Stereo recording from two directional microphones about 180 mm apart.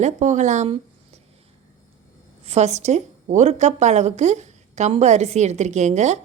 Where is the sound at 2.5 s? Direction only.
40° right (ahead or behind).